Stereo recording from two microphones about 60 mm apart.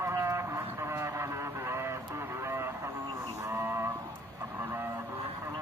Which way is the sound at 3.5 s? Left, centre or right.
Right.